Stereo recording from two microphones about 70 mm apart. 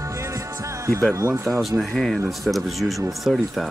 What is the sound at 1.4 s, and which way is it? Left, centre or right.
Speech, centre.